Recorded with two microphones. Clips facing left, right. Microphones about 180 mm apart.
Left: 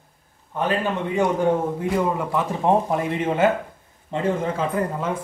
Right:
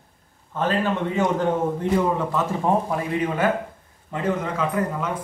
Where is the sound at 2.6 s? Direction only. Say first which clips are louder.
Left 5 dB; 25° left (ahead or behind).